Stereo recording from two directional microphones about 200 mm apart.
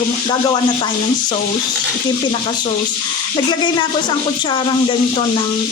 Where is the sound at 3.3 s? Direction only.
20° left (ahead or behind).